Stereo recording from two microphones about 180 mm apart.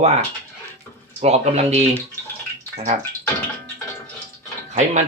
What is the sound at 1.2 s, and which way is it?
Speech, 35° right (ahead or behind).